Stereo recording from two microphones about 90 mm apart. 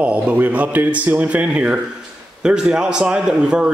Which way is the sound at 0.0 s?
15° right (ahead or behind).